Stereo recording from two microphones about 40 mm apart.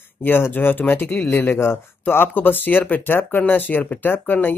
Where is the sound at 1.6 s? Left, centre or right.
Left.